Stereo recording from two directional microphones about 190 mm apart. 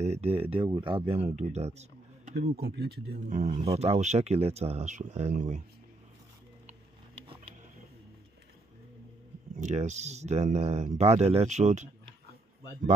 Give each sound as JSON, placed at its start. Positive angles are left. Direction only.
{"t": 0.0, "sound": "speech", "side_deg": -35}
{"t": 2.3, "sound": "speech", "side_deg": -60}
{"t": 3.3, "sound": "speech", "side_deg": -40}
{"t": 9.6, "sound": "speech", "side_deg": -35}